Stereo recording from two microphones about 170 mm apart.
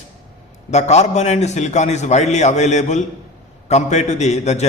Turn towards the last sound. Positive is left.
turn(degrees=40)  # may be behind; listen again after turning